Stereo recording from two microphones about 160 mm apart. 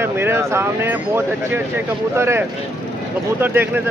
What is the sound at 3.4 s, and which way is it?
Speech, 10° right (ahead or behind).